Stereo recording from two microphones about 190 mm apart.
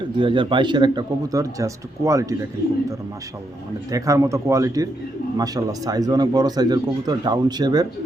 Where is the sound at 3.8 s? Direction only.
15° right (ahead or behind).